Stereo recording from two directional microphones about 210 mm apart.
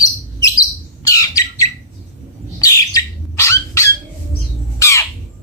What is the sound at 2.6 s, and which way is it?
Bird, 15° left (ahead or behind).